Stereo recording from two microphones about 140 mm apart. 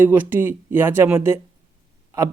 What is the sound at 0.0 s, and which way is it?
Speech, 15° right (ahead or behind).